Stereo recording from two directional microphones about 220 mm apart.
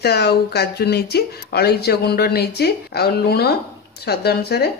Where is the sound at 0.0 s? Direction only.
50° left (ahead or behind).